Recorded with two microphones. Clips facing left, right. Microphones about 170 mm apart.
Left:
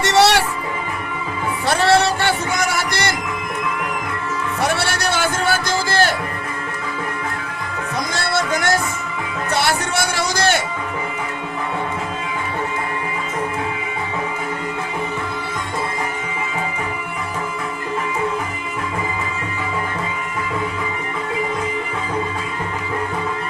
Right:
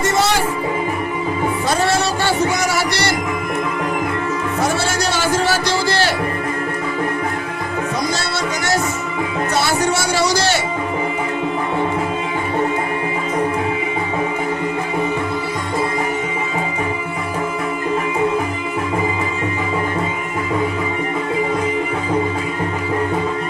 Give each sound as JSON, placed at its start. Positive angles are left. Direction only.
{"t": 0.0, "sound": "music", "side_deg": 75}
{"t": 1.6, "sound": "music", "side_deg": 65}
{"t": 4.6, "sound": "music", "side_deg": 60}
{"t": 8.1, "sound": "music", "side_deg": 55}
{"t": 9.6, "sound": "a sound", "side_deg": 60}